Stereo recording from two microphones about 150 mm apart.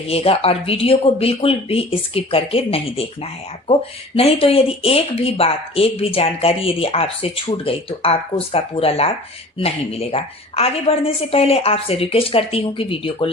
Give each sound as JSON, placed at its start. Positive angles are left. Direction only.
{"t": 0.1, "sound": "speech", "side_deg": 40}